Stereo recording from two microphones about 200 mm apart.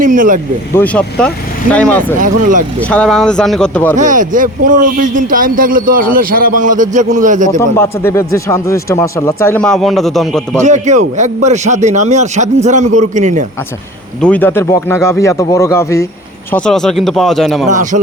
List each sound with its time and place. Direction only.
0.0 s speech: 40° right (ahead or behind)
0.7 s speech: 10° left (ahead or behind)
2.2 s speech: 40° right (ahead or behind)
2.9 s speech: 5° left (ahead or behind)
3.9 s speech: 40° right (ahead or behind)
7.8 s speech: 15° left (ahead or behind)
10.6 s speech: 35° right (ahead or behind)
14.2 s speech: 5° left (ahead or behind)
16.5 s speech: 5° left (ahead or behind)
17.7 s speech: 40° right (ahead or behind)